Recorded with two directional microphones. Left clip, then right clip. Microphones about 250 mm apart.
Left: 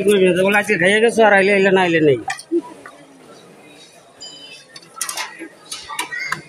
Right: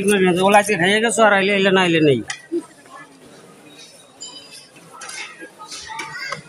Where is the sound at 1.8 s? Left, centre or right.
Centre.